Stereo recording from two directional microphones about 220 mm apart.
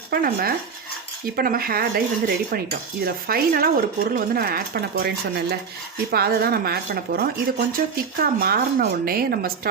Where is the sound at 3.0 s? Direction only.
40° right (ahead or behind).